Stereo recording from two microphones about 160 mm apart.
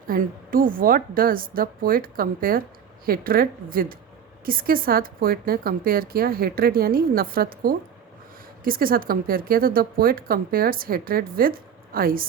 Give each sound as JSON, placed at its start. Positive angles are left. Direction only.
{"t": 0.1, "sound": "speech", "side_deg": -60}